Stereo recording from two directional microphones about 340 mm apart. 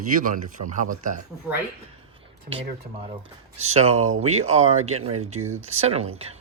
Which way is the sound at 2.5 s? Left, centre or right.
Centre.